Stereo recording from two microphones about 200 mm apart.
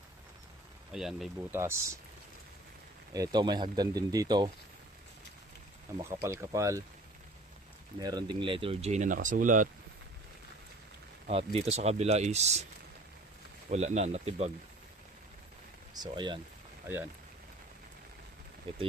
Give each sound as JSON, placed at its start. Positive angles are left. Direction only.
{"t": 0.9, "sound": "speech", "side_deg": 0}
{"t": 1.5, "sound": "speech", "side_deg": -15}
{"t": 3.1, "sound": "speech", "side_deg": -20}
{"t": 6.2, "sound": "speech", "side_deg": -15}
{"t": 7.9, "sound": "speech", "side_deg": -20}
{"t": 11.3, "sound": "speech", "side_deg": -30}
{"t": 13.7, "sound": "speech", "side_deg": -35}
{"t": 16.0, "sound": "speech", "side_deg": -20}
{"t": 18.7, "sound": "speech", "side_deg": -25}